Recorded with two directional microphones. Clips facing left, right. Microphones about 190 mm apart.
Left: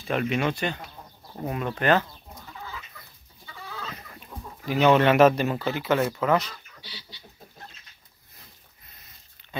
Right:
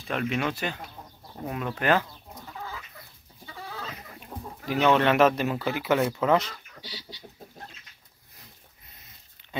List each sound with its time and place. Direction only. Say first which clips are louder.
0.0 s speech: left 3 dB; centre (ahead or behind)
3.4 s chicken: right 1 dB; 40° right (ahead or behind)
4.6 s speech: left 3 dB; centre (ahead or behind)
5.7 s speech: right 1 dB; 15° right (ahead or behind)
6.8 s chicken: right 4 dB; 40° right (ahead or behind)